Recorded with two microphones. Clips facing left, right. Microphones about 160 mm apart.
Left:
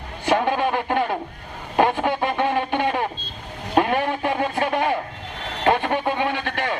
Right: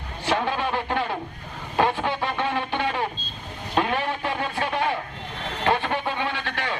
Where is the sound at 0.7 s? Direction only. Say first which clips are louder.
Left 4 dB; 15° left (ahead or behind).